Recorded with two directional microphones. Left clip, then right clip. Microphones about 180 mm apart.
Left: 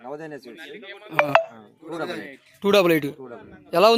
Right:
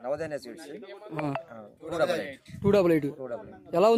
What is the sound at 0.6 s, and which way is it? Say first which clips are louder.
Speech: left 4 dB; 35° left (ahead or behind).